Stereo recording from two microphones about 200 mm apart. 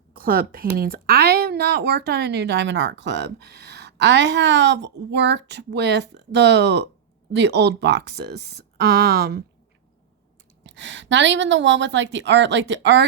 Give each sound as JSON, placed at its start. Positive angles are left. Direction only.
{"t": 0.1, "sound": "a woman's voice", "side_deg": -45}
{"t": 10.6, "sound": "a woman's voice", "side_deg": -65}